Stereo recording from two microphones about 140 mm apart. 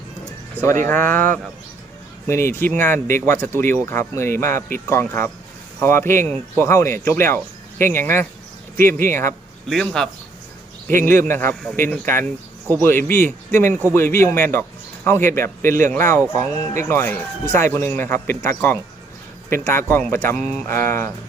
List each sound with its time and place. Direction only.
0.5 s speech: 20° left (ahead or behind)
9.6 s a man's voice: 5° left (ahead or behind)
10.8 s speech: 15° left (ahead or behind)